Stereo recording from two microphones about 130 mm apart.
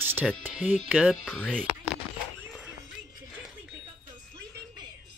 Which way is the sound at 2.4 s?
5° right (ahead or behind).